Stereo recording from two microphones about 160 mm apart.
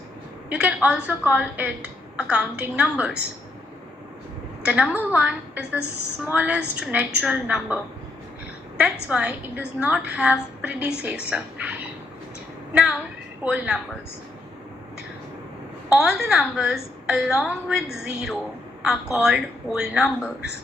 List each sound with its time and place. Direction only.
0.5 s a woman's voice: 5° right (ahead or behind)
4.6 s a woman's voice: 5° right (ahead or behind)
15.9 s a woman's voice: 5° right (ahead or behind)